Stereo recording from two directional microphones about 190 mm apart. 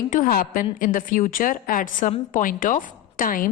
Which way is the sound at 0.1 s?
45° left (ahead or behind).